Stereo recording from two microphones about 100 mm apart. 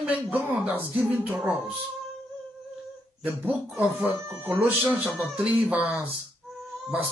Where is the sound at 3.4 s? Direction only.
15° right (ahead or behind).